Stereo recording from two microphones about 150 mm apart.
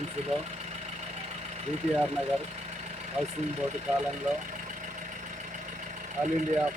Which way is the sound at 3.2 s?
45° right (ahead or behind).